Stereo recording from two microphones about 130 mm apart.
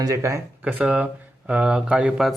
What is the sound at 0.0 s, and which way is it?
Speech, 25° right (ahead or behind).